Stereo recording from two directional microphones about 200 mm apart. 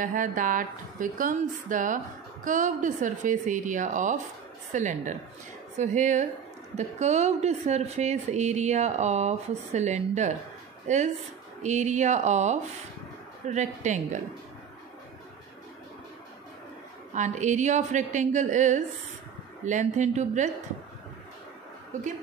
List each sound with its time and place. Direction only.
0.0 s a woman's voice: 40° right (ahead or behind)
17.1 s a woman's voice: 35° right (ahead or behind)